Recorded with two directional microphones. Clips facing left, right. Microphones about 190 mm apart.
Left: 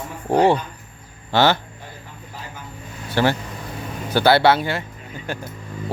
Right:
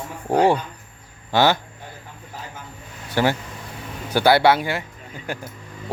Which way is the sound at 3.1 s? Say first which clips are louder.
Left 1 dB; 15° right (ahead or behind).